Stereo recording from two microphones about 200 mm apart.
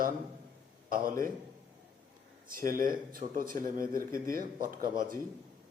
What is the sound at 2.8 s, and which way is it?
A man's voice, 45° right (ahead or behind).